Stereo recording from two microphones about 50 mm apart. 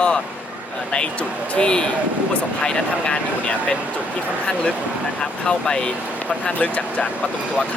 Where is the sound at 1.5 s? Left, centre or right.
Centre.